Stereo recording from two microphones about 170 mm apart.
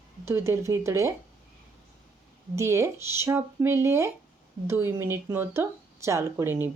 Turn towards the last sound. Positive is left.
turn(degrees=-15)  # may be behind; listen again after turning